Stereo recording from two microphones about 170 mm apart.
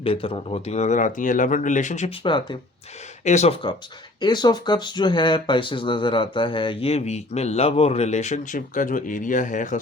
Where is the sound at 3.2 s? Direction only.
40° left (ahead or behind).